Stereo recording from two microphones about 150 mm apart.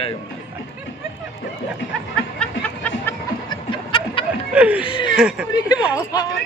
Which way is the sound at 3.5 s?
35° left (ahead or behind).